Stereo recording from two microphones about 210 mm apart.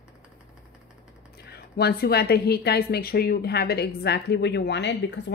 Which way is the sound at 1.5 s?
50° left (ahead or behind).